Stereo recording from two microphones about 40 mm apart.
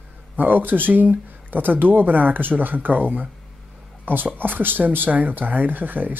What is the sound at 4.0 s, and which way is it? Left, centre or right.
Speech, right.